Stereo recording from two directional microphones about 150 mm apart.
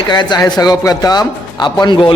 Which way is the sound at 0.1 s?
30° left (ahead or behind).